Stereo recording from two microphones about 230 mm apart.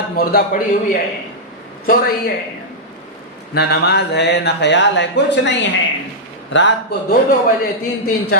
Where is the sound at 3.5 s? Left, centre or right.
Left.